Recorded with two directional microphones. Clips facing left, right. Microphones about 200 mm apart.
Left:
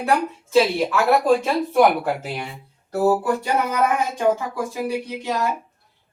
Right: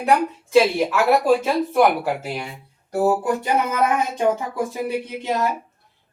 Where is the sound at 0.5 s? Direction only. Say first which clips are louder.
Right 1 dB; 10° right (ahead or behind).